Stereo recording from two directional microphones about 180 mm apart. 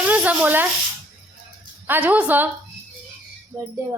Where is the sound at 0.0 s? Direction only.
5° right (ahead or behind).